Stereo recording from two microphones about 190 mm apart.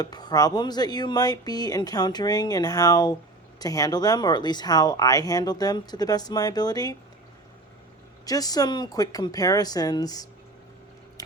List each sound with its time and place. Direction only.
0.0 s speech: 20° left (ahead or behind)
8.2 s speech: 20° left (ahead or behind)